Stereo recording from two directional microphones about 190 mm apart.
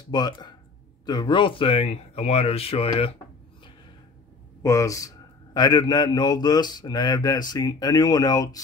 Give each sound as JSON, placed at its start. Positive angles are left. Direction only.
{"t": 0.1, "sound": "a man's voice", "side_deg": 20}
{"t": 4.6, "sound": "a man's voice", "side_deg": 15}